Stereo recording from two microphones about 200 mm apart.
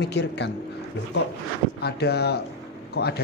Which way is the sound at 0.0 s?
55° left (ahead or behind).